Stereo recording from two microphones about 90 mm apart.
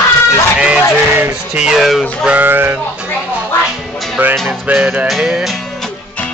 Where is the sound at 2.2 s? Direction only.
20° right (ahead or behind).